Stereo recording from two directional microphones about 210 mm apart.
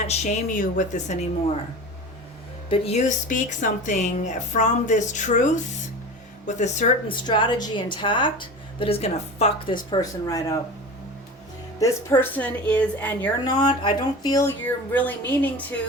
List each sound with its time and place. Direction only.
0.1 s speech: 35° left (ahead or behind)
2.6 s speech: 25° left (ahead or behind)
7.3 s a woman's voice: 20° left (ahead or behind)
11.8 s speech: 15° left (ahead or behind)
13.5 s a woman's voice: 20° left (ahead or behind)